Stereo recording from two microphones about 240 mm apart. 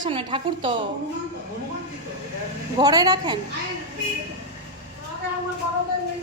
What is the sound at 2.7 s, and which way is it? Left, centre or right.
Speech, centre.